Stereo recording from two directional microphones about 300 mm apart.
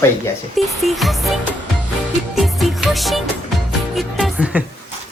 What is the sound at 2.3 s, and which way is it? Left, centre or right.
Music, centre.